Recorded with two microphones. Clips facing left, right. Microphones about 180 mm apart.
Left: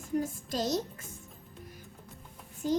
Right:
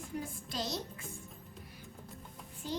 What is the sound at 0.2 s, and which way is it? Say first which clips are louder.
Speech: left 6 dB; 45° left (ahead or behind).